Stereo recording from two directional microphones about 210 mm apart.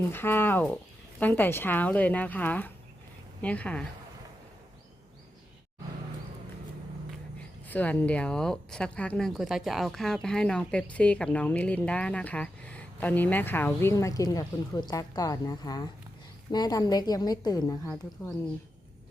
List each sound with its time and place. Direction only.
0.0 s speech: 10° left (ahead or behind)
7.7 s a woman's voice: 5° left (ahead or behind)